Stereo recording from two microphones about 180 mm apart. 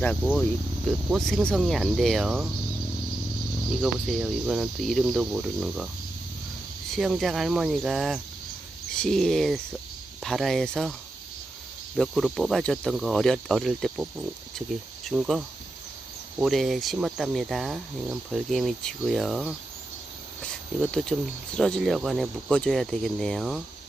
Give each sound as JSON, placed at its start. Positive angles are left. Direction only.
{"t": 0.0, "sound": "speech", "side_deg": 10}
{"t": 3.8, "sound": "speech", "side_deg": -5}
{"t": 6.9, "sound": "speech", "side_deg": 0}
{"t": 11.9, "sound": "speech", "side_deg": 0}
{"t": 15.1, "sound": "speech", "side_deg": -5}
{"t": 20.9, "sound": "speech", "side_deg": 5}